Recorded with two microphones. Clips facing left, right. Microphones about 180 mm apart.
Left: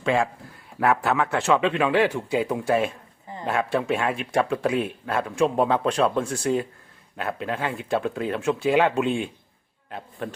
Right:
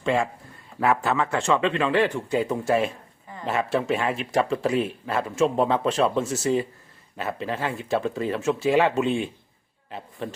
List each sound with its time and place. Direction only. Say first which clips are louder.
0.0 s a man's voice: left 1 dB; centre (ahead or behind)